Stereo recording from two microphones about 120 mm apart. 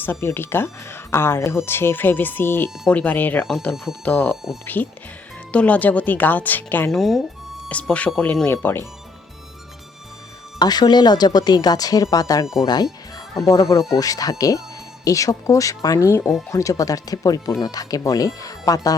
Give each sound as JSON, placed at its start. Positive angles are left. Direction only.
{"t": 0.0, "sound": "speech", "side_deg": 20}
{"t": 6.9, "sound": "speech", "side_deg": 0}
{"t": 10.6, "sound": "speech", "side_deg": 35}